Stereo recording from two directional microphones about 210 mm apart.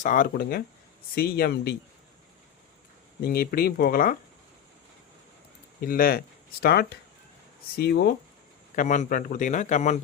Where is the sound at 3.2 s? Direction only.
45° left (ahead or behind).